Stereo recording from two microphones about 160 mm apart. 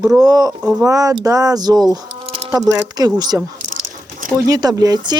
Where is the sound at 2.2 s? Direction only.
40° right (ahead or behind).